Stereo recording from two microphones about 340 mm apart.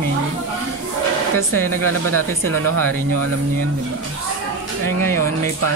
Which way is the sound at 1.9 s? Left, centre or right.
Right.